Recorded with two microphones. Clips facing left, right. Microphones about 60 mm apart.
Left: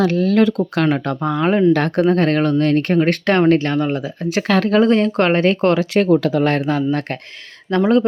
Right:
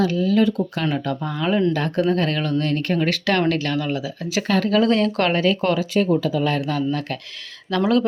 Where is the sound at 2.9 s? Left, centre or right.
Left.